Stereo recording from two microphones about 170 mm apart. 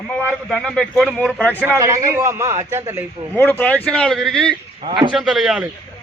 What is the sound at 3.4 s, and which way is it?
Speech, 10° left (ahead or behind).